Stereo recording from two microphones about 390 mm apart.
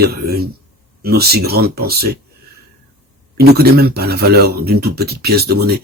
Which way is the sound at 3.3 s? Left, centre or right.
Right.